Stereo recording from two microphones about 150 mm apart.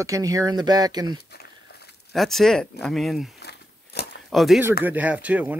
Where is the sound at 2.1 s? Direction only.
Centre (ahead or behind).